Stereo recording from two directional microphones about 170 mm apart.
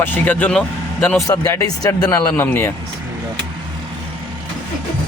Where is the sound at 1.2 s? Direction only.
20° left (ahead or behind).